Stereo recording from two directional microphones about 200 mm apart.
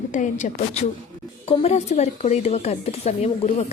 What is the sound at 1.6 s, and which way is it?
A woman's voice, 35° left (ahead or behind).